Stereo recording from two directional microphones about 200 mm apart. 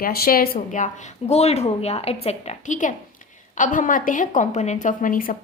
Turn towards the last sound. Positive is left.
turn(degrees=45)  # may be behind; listen again after turning